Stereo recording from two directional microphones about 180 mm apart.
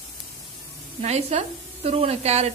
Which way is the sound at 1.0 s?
35° right (ahead or behind).